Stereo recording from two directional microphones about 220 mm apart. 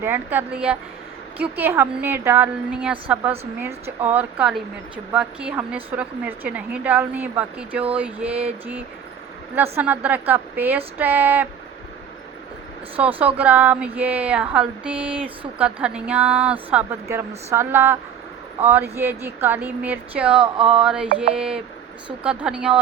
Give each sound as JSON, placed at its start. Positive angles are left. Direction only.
{"t": 0.0, "sound": "speech", "side_deg": -10}
{"t": 13.0, "sound": "speech", "side_deg": -5}
{"t": 20.4, "sound": "a sound", "side_deg": -25}
{"t": 20.7, "sound": "speech", "side_deg": -5}